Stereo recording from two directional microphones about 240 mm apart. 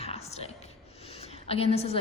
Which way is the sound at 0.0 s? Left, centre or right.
Left.